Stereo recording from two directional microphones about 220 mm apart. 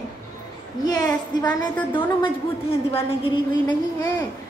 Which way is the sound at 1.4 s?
20° left (ahead or behind).